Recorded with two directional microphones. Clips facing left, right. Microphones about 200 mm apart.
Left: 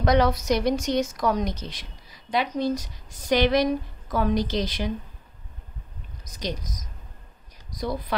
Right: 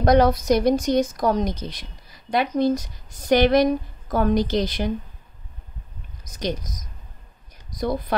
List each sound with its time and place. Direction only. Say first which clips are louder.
0.0 s a woman's voice: right 4 dB; 45° right (ahead or behind)
2.3 s a woman's voice: right 4 dB; 50° right (ahead or behind)
7.7 s speech: right 4 dB; 50° right (ahead or behind)